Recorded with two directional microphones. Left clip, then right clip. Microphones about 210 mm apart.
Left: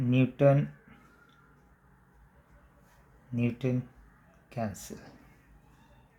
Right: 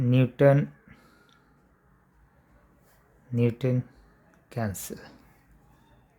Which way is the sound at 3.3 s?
45° right (ahead or behind).